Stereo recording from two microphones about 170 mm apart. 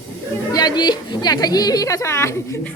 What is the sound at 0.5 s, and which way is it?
A woman's voice, 25° left (ahead or behind).